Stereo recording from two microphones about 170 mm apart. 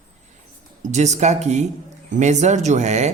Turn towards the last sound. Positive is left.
turn(degrees=-40)  # may be behind; listen again after turning